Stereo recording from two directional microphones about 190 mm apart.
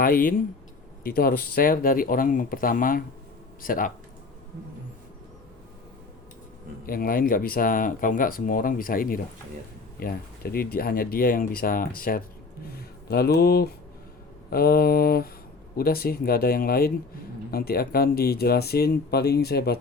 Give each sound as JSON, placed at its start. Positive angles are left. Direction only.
{"t": 0.0, "sound": "speech", "side_deg": 50}
{"t": 6.8, "sound": "speech", "side_deg": 50}